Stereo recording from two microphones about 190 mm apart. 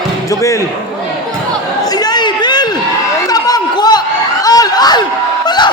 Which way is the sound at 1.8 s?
20° left (ahead or behind).